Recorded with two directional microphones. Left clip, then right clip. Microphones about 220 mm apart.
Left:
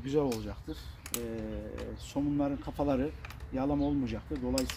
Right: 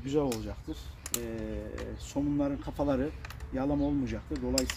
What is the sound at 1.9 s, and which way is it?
Speech, 15° left (ahead or behind).